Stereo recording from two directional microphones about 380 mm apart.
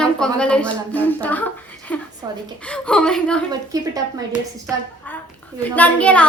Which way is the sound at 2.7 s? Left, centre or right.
Centre.